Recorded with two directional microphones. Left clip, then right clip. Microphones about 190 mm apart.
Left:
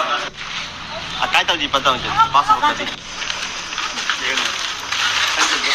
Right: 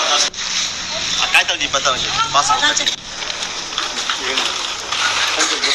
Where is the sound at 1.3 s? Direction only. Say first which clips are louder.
Even; 70° left (ahead or behind).